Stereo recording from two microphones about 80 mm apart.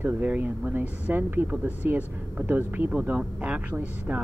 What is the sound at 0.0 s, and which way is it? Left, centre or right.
Speech, right.